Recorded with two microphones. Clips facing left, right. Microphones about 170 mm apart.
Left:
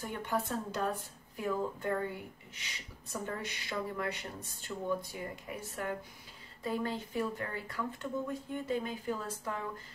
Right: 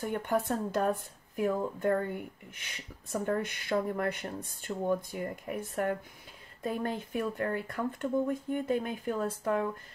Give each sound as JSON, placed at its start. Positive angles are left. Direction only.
{"t": 0.0, "sound": "speech", "side_deg": -50}